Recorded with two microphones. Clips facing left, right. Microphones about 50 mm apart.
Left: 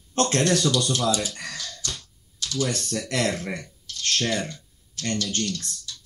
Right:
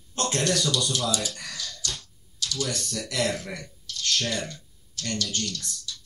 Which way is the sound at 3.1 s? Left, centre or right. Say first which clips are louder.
Left 2 dB; left.